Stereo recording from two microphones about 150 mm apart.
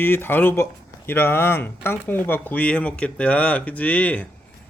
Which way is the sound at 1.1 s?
15° left (ahead or behind).